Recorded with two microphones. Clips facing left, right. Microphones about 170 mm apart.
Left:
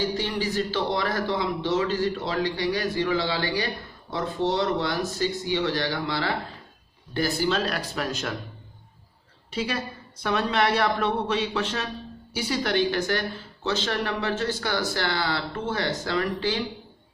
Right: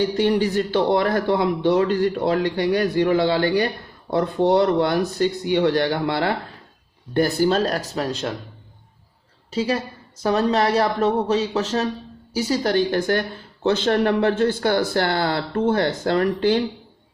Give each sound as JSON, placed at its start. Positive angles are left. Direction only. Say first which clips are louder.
{"t": 0.0, "sound": "speech", "louder": "right 8 dB", "side_deg": -60}
{"t": 10.2, "sound": "speech", "louder": "right 5 dB", "side_deg": -35}